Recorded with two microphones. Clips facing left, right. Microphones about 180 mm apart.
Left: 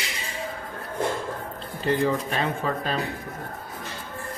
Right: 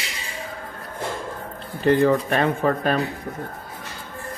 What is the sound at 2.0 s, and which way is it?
Speech, 60° right (ahead or behind).